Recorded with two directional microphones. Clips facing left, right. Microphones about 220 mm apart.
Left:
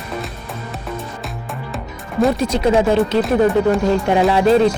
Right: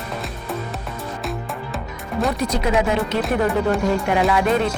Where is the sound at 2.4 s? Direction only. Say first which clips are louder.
Left 5 dB; 30° left (ahead or behind).